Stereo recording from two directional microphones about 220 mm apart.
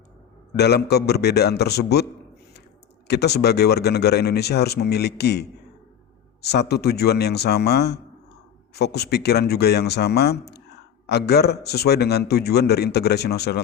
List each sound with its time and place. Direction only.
0.5 s a man's voice: 50° left (ahead or behind)
3.1 s a man's voice: 50° left (ahead or behind)